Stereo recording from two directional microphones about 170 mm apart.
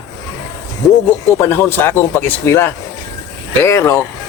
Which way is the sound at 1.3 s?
15° left (ahead or behind).